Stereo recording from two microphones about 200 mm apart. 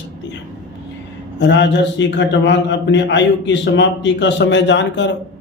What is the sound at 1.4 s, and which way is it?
A man's voice, 60° left (ahead or behind).